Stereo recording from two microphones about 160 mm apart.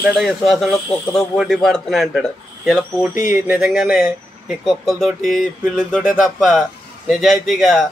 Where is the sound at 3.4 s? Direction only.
10° right (ahead or behind).